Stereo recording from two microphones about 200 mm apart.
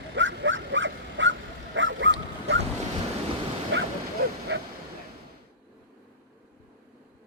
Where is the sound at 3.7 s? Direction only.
65° right (ahead or behind).